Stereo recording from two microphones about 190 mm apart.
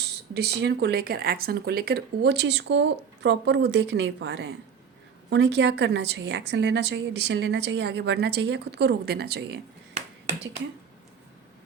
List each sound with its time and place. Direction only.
0.3 s a woman's voice: 60° right (ahead or behind)